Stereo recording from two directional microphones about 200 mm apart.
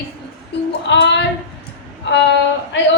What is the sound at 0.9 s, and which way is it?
Female singing, 60° left (ahead or behind).